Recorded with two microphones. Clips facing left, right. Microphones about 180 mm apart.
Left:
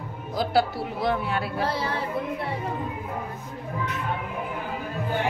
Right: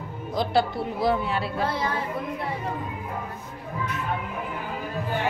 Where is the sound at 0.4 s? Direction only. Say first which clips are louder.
Even; 5° left (ahead or behind).